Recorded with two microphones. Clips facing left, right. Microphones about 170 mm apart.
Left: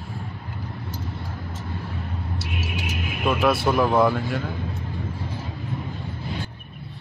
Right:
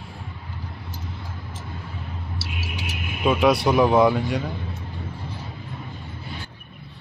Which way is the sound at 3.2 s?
Centre (ahead or behind).